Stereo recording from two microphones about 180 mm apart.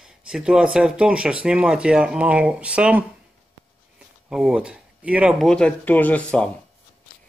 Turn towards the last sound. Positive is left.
turn(degrees=5)  # may be behind; listen again after turning